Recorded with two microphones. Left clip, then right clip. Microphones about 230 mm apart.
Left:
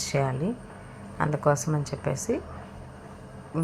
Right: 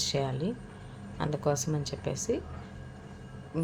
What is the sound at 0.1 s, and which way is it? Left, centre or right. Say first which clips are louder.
A woman's voice: left 4 dB; centre.